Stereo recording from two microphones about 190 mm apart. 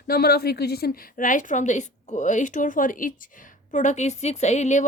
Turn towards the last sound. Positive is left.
turn(degrees=40)  # may be behind; listen again after turning